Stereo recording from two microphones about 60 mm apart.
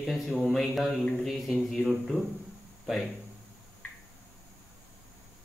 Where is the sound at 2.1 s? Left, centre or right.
Left.